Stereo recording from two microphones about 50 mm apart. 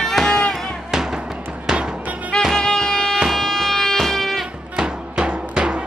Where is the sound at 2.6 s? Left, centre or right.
Centre.